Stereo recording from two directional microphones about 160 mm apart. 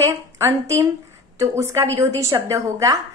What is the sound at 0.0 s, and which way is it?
A woman's voice, 15° right (ahead or behind).